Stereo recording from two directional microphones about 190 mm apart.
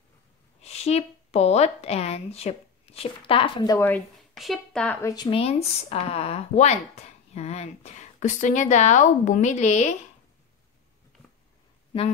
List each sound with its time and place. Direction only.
0.6 s a woman's voice: 35° left (ahead or behind); by 4.0 s 15° left (ahead or behind)
4.4 s a woman's voice: centre (ahead or behind)
5.0 s speech: 20° left (ahead or behind); by 9.9 s 35° left (ahead or behind)